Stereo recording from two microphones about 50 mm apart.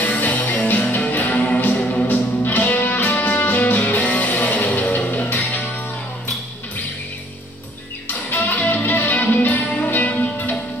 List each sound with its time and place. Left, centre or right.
0.0 s music: left
8.1 s music: left
8.5 s music: left